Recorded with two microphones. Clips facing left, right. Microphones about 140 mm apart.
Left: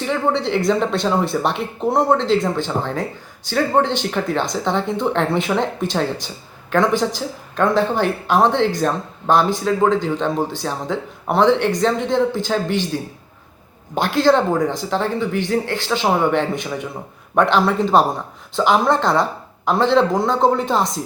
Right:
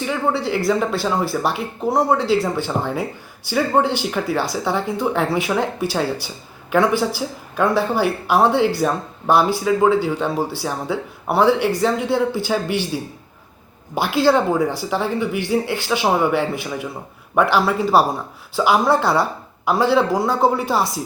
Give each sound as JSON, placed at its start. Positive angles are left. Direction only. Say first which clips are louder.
{"t": 0.0, "sound": "speech", "louder": "left 1 dB", "side_deg": -5}